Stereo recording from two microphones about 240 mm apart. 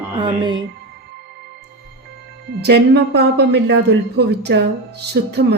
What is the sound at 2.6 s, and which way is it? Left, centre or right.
Speech, right.